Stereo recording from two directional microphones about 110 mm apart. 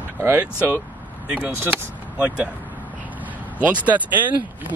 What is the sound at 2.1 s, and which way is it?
Speech, 10° right (ahead or behind).